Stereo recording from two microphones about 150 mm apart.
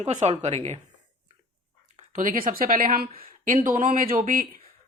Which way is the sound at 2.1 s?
65° right (ahead or behind).